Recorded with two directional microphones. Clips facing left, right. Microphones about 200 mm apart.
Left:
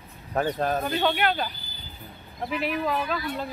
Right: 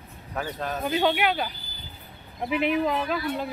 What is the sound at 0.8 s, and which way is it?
Speech, 10° right (ahead or behind).